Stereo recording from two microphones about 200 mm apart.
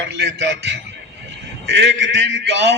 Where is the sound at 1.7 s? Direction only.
65° right (ahead or behind).